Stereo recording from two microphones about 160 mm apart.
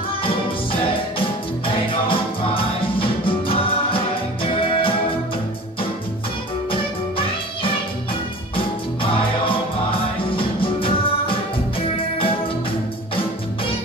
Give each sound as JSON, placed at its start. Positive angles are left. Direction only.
{"t": 0.2, "sound": "music", "side_deg": 35}
{"t": 6.7, "sound": "music", "side_deg": 35}